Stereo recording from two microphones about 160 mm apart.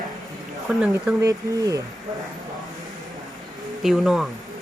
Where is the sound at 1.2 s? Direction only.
20° right (ahead or behind).